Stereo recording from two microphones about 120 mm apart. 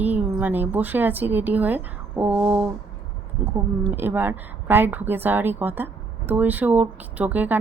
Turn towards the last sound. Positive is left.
turn(degrees=-15)  # may be behind; listen again after turning